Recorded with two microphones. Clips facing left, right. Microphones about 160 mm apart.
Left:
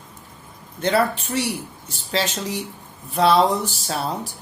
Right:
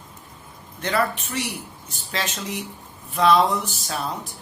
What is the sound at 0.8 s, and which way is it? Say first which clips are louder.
Speech: left 4 dB; 30° left (ahead or behind).